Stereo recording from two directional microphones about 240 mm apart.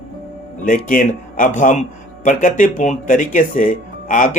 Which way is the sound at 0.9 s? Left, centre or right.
Left.